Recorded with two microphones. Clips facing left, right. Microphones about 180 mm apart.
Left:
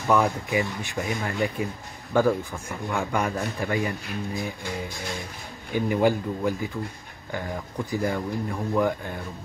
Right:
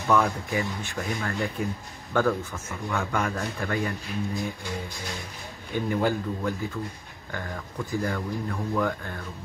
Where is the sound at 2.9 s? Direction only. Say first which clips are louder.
Left 2 dB; 15° left (ahead or behind).